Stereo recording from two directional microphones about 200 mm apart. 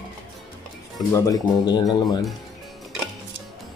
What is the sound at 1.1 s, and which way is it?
Speech, 15° left (ahead or behind).